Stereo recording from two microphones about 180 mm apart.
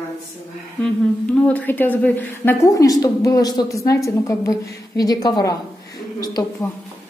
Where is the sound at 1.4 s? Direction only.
10° left (ahead or behind).